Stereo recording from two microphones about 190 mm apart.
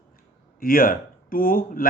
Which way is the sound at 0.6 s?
45° left (ahead or behind).